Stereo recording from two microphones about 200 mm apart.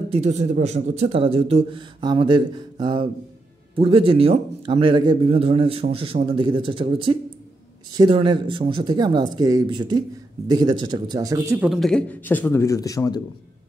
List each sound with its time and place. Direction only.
0.1 s a man's voice: 35° right (ahead or behind); by 13.2 s 20° left (ahead or behind)